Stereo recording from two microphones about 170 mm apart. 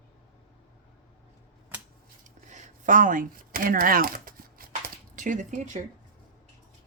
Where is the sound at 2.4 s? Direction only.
45° right (ahead or behind).